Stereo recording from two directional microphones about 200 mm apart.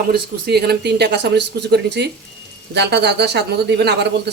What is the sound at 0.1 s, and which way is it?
Speech, 55° right (ahead or behind).